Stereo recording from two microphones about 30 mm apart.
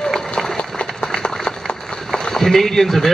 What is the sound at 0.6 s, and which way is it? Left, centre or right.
Applause, left.